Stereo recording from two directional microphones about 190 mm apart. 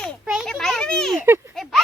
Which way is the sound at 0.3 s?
Centre (ahead or behind).